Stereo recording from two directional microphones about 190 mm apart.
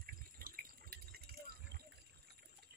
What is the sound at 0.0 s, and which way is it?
Water, 50° right (ahead or behind).